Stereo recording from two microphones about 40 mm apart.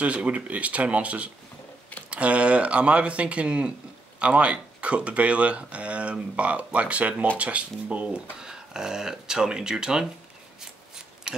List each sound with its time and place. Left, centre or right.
0.0 s speech: right
8.4 s speech: centre
11.3 s a sound: centre